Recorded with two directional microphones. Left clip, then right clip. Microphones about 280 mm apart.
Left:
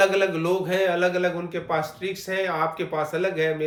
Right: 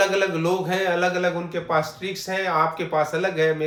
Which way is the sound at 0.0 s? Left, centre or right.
Centre.